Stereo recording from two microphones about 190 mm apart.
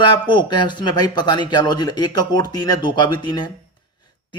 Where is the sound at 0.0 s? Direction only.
25° left (ahead or behind).